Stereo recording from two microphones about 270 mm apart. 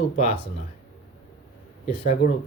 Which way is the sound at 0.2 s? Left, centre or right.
Left.